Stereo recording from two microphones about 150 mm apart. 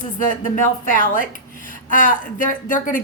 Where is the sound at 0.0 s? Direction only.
60° left (ahead or behind).